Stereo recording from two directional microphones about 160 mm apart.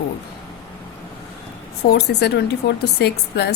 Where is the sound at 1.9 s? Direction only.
90° left.